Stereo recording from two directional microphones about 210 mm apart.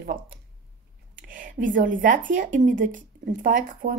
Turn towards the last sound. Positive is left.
turn(degrees=-40)  # may be behind; listen again after turning